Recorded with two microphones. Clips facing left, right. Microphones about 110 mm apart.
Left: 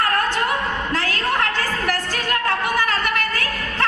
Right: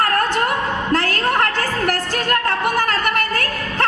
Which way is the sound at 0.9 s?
50° right (ahead or behind).